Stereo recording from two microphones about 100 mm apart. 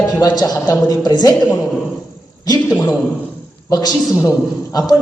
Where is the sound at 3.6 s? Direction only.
35° left (ahead or behind).